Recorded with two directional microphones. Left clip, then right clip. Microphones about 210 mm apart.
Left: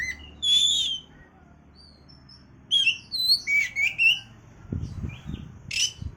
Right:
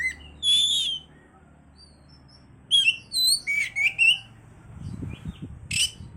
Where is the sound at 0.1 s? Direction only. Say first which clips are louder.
Even; 20° right (ahead or behind).